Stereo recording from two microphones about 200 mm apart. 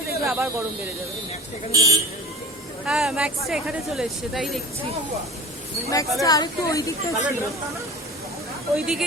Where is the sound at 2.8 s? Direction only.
Centre (ahead or behind).